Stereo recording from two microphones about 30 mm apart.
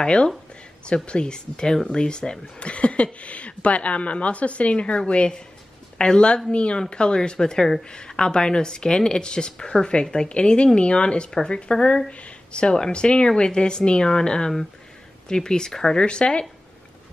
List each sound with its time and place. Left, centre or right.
0.0 s speech: left
2.6 s speech: left; by 16.0 s centre
16.0 s speech: left